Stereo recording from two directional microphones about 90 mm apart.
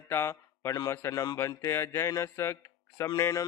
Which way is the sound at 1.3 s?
30° left (ahead or behind).